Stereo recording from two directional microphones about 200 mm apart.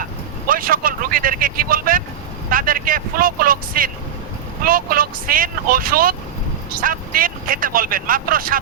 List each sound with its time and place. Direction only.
0.4 s speech: 45° right (ahead or behind)